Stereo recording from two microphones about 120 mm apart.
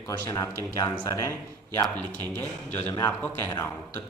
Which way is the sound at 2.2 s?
15° left (ahead or behind).